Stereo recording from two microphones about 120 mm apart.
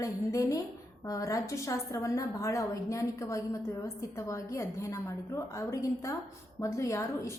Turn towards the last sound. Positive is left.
turn(degrees=25)  # may be behind; listen again after turning